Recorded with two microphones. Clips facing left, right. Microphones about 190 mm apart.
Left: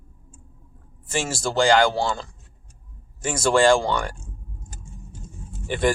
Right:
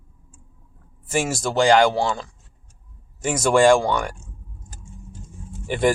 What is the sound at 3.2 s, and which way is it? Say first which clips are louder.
Speech: right 2 dB; 15° right (ahead or behind).